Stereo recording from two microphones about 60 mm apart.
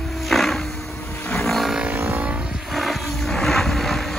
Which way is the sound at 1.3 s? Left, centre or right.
Centre.